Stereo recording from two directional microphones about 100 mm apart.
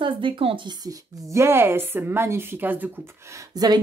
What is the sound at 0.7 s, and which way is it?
Speech, 35° right (ahead or behind).